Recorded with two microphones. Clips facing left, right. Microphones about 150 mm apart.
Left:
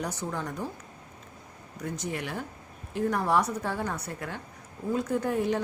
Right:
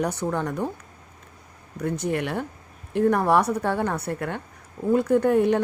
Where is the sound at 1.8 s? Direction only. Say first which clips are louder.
Right 8 dB; 60° right (ahead or behind).